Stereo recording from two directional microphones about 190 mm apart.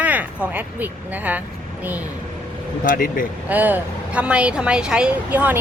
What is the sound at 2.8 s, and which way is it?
Speech, 45° left (ahead or behind).